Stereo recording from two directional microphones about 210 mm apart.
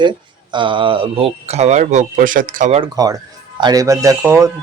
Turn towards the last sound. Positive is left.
turn(degrees=-15)  # may be behind; listen again after turning